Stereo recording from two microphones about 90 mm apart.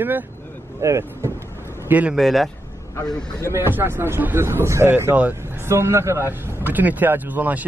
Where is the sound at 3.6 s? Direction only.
25° right (ahead or behind).